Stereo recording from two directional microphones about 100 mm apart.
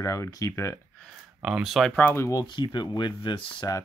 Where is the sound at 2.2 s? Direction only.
35° left (ahead or behind).